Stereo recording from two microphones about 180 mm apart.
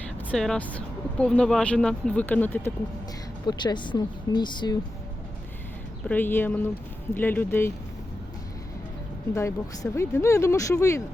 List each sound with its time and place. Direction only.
0.3 s speech: 5° left (ahead or behind)
3.4 s speech: 25° left (ahead or behind)
6.1 s speech: 10° left (ahead or behind)
9.3 s speech: 15° left (ahead or behind)